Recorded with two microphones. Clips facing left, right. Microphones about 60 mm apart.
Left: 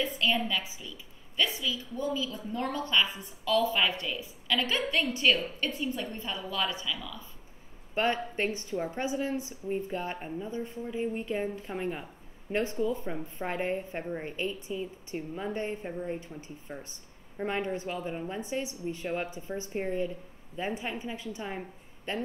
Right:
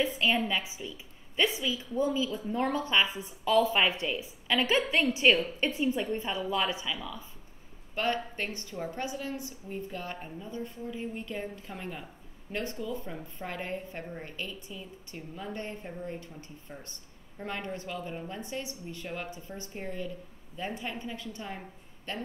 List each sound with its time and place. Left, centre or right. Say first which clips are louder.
0.0 s a woman's voice: right 1 dB; right
7.9 s a woman's voice: left 2 dB; left